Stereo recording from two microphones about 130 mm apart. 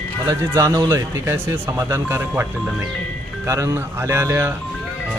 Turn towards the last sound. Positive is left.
turn(degrees=-20)  # may be behind; listen again after turning